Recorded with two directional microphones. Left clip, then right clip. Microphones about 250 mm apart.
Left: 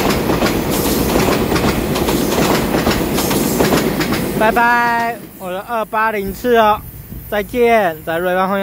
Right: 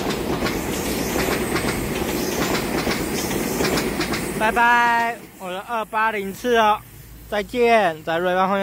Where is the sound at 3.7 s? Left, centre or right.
Left.